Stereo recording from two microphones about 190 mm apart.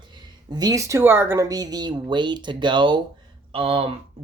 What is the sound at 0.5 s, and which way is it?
Speech, 20° right (ahead or behind).